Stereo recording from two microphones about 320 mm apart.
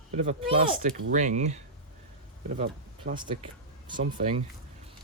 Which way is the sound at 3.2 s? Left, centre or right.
Centre.